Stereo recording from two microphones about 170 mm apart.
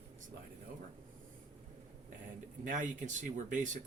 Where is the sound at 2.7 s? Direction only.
50° right (ahead or behind).